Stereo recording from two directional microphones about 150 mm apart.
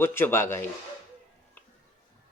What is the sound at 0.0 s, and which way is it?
Speech, 15° left (ahead or behind).